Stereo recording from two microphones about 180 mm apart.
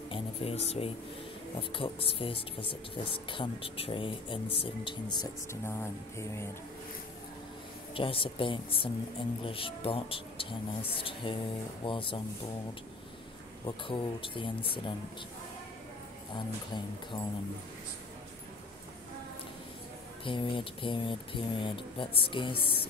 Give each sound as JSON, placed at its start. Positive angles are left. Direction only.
{"t": 0.1, "sound": "a sound", "side_deg": 30}
{"t": 1.6, "sound": "speech", "side_deg": 30}
{"t": 7.9, "sound": "speech", "side_deg": 30}
{"t": 13.7, "sound": "speech", "side_deg": 30}
{"t": 16.3, "sound": "speech", "side_deg": 25}
{"t": 20.2, "sound": "speech", "side_deg": 25}